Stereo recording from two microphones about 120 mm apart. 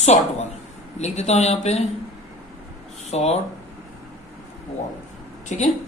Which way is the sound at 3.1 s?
65° left (ahead or behind).